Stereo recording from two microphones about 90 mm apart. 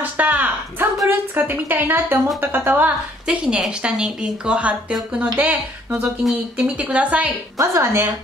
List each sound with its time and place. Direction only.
0.0 s a sound: 15° right (ahead or behind)
1.0 s a woman's voice: 20° right (ahead or behind)
3.3 s a woman's voice: 10° right (ahead or behind)
7.5 s a woman's voice: 35° right (ahead or behind)